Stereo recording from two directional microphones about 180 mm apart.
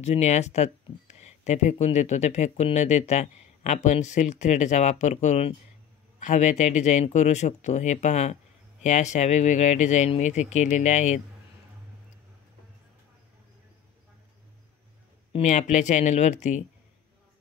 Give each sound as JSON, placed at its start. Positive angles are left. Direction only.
{"t": 0.0, "sound": "speech", "side_deg": 40}
{"t": 15.3, "sound": "speech", "side_deg": 40}